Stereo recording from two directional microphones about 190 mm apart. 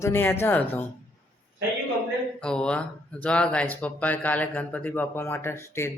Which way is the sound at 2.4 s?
5° left (ahead or behind).